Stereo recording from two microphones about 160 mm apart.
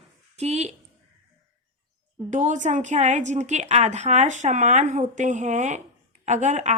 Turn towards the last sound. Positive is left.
turn(degrees=-50)  # may be behind; listen again after turning